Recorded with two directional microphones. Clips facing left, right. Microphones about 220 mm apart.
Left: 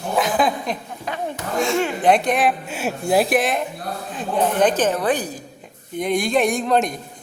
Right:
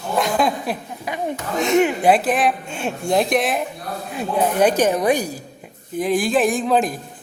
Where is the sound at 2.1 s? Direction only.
5° right (ahead or behind).